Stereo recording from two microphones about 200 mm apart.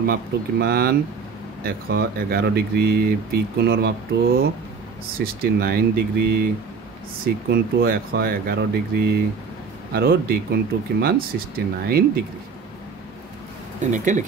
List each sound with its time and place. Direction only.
0.0 s speech: 50° right (ahead or behind)
7.4 s speech: 50° right (ahead or behind)
13.7 s speech: 40° right (ahead or behind)